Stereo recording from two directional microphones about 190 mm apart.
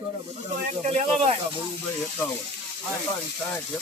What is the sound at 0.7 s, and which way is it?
Speech, 35° right (ahead or behind).